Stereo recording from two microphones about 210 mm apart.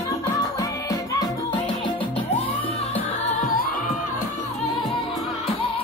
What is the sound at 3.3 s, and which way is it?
Music, 35° left (ahead or behind).